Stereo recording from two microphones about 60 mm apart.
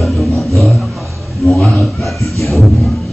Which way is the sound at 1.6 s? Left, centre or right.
Centre.